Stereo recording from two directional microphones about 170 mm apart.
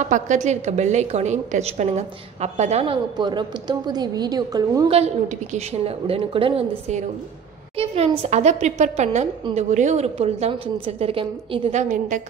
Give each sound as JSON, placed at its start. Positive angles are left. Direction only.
{"t": 0.0, "sound": "a woman's voice", "side_deg": -45}
{"t": 4.9, "sound": "a woman's voice", "side_deg": -40}